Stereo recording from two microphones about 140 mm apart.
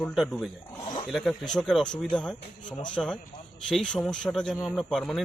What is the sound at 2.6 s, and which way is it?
Speech, 35° left (ahead or behind).